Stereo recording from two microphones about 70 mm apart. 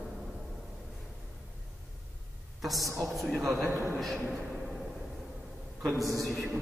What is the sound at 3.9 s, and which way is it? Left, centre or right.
Speech, centre.